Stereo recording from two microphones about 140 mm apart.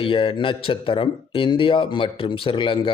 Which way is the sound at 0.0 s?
40° left (ahead or behind).